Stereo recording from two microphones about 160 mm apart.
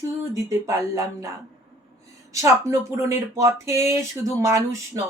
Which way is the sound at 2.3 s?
20° right (ahead or behind).